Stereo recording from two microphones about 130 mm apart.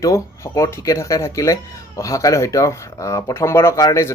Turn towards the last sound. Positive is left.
turn(degrees=25)  # may be behind; listen again after turning